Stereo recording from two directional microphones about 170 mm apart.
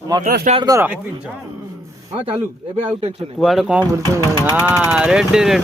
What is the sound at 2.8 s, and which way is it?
Speech, 35° right (ahead or behind).